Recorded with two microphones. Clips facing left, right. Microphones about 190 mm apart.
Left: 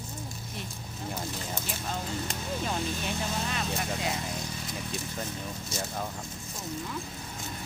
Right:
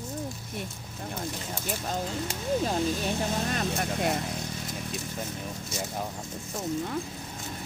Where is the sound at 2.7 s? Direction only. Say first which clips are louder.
Right 4 dB; 40° right (ahead or behind).